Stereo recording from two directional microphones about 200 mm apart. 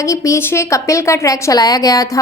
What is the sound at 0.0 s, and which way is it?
A woman's voice, 15° left (ahead or behind).